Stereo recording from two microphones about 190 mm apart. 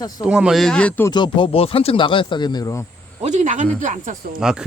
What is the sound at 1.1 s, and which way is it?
Speech, 25° left (ahead or behind).